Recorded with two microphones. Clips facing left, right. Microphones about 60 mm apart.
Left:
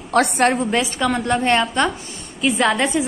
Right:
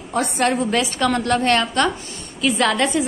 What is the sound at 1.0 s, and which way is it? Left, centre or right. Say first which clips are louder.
A woman's voice: right 2 dB; centre.